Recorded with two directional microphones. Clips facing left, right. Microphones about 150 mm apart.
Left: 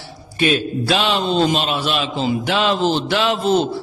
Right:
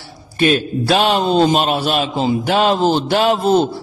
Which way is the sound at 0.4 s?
45° right (ahead or behind).